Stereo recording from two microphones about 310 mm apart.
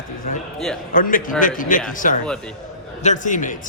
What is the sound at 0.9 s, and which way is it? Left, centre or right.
A man's voice, left.